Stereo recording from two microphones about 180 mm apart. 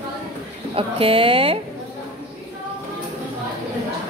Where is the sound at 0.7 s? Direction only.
30° right (ahead or behind).